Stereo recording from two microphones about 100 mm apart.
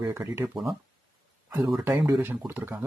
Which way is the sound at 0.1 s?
25° right (ahead or behind).